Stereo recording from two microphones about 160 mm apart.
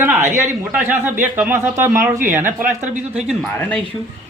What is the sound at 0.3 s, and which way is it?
Speech, 15° right (ahead or behind).